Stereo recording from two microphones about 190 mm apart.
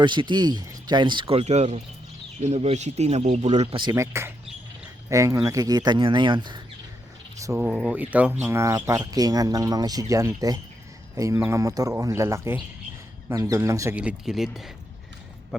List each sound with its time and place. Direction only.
0.0 s speech: 25° right (ahead or behind)
7.7 s speech: 5° right (ahead or behind)